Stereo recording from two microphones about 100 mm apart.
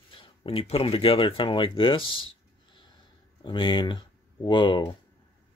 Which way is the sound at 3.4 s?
50° left (ahead or behind).